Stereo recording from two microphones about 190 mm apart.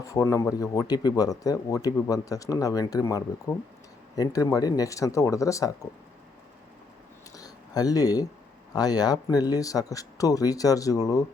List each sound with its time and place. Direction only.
0.0 s speech: 15° left (ahead or behind)
7.3 s a sound: 20° left (ahead or behind)
8.7 s speech: 20° left (ahead or behind)